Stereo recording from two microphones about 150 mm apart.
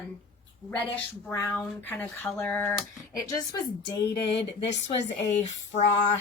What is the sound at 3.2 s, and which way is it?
Speech, 25° left (ahead or behind).